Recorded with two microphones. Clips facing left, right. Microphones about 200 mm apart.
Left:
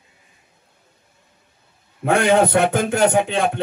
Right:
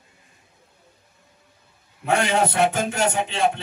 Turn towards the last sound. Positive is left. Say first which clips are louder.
# left 5 dB
turn(degrees=55)  # may be behind; listen again after turning